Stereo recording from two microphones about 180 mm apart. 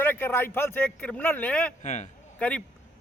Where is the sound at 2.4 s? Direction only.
5° left (ahead or behind).